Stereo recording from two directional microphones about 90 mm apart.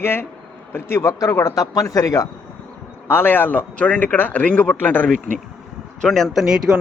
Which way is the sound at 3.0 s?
25° left (ahead or behind).